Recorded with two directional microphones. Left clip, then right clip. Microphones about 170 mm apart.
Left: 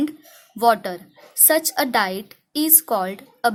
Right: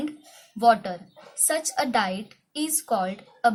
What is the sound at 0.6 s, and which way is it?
A woman's voice, 40° left (ahead or behind).